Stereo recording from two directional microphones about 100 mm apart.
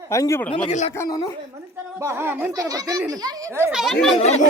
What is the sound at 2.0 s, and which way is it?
Speech, 25° right (ahead or behind).